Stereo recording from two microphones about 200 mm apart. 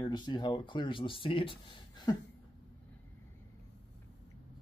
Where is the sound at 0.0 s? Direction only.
20° left (ahead or behind).